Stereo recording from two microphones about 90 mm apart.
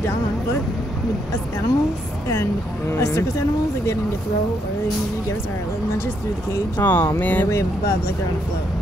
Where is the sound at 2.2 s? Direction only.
30° left (ahead or behind).